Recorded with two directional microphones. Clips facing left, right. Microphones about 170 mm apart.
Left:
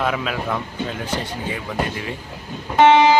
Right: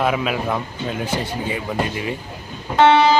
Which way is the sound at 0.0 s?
10° right (ahead or behind).